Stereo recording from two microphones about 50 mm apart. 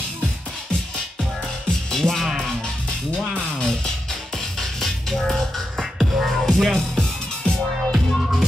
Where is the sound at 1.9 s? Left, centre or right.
Centre.